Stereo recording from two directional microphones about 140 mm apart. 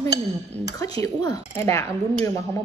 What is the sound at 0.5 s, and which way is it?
Speech, 10° left (ahead or behind).